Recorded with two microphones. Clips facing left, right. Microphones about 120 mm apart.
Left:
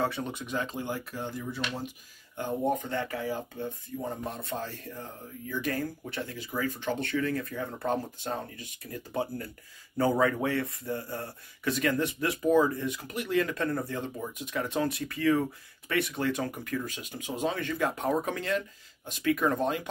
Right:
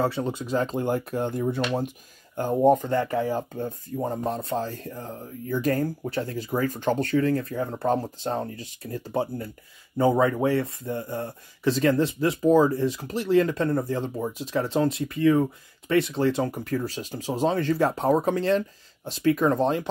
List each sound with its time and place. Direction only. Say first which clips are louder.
0.0 s speech: right 5 dB; 30° right (ahead or behind)
0.6 s speech: right 8 dB; 45° right (ahead or behind); by 19.9 s 25° right (ahead or behind)